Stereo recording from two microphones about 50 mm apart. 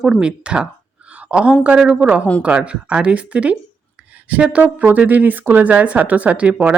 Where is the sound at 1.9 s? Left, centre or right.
Right.